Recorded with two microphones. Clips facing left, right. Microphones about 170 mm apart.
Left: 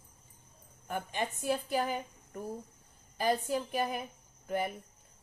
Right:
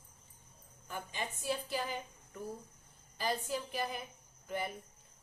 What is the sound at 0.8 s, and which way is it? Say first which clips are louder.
A woman's voice: left 6 dB; 60° left (ahead or behind).